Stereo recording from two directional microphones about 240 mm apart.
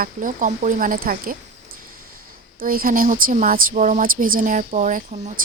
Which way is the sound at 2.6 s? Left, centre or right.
Right.